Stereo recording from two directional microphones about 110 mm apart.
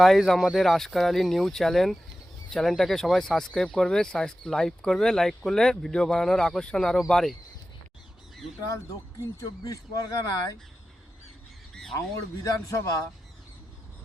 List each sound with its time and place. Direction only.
0.0 s speech: centre (ahead or behind)
9.4 s speech: 35° left (ahead or behind)
11.9 s speech: 30° left (ahead or behind)